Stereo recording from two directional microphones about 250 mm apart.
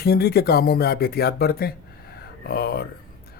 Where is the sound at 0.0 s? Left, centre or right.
Left.